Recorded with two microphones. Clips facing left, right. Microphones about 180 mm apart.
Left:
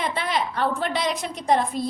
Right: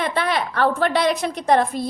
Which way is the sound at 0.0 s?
65° right (ahead or behind).